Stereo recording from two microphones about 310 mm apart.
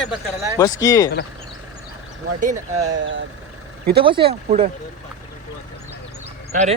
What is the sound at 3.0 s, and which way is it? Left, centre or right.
Speech, right.